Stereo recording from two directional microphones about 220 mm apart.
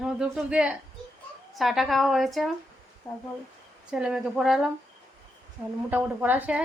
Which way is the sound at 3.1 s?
15° left (ahead or behind).